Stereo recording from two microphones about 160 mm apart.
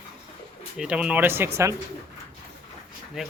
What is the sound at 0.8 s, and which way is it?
Speech, 5° right (ahead or behind).